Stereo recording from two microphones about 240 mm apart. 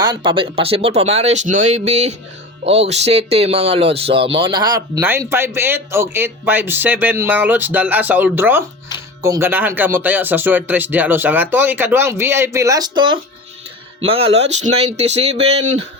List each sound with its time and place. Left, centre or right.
0.0 s speech: centre